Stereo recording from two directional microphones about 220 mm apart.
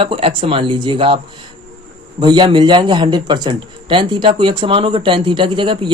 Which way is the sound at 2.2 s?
20° right (ahead or behind).